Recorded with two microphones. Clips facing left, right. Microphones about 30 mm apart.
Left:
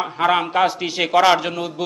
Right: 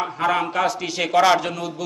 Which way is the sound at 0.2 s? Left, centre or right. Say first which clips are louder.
Left 4 dB; left.